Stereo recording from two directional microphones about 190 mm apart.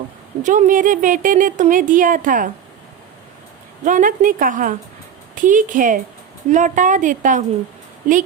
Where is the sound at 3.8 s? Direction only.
45° right (ahead or behind).